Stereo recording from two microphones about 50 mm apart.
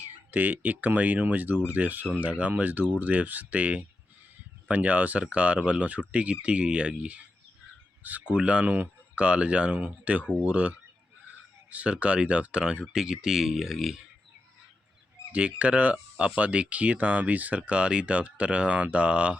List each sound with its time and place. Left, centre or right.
0.3 s speech: right; by 14.0 s centre
15.3 s speech: right